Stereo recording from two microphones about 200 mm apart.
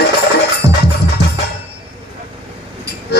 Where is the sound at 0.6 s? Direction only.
20° right (ahead or behind).